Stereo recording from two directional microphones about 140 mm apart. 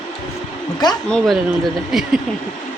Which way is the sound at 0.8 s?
30° left (ahead or behind).